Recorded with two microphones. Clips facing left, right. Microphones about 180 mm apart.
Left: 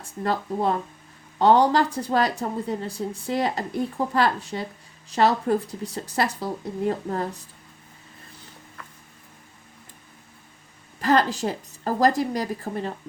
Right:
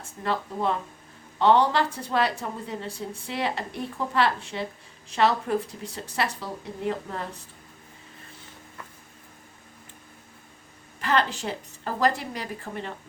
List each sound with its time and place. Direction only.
0.2 s speech: 40° left (ahead or behind)
11.0 s speech: 40° left (ahead or behind)